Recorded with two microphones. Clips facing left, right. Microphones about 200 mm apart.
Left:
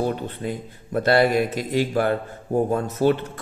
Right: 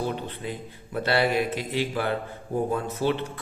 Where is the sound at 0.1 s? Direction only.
45° left (ahead or behind).